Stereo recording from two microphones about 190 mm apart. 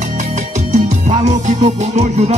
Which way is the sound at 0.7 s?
40° right (ahead or behind).